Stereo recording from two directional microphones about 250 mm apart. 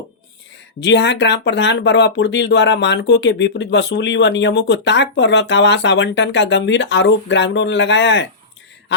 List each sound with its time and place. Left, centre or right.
0.8 s speech: left